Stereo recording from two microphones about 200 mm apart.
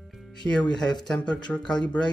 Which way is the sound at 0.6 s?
20° left (ahead or behind).